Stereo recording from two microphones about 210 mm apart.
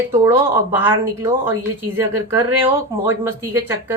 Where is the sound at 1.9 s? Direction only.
10° right (ahead or behind).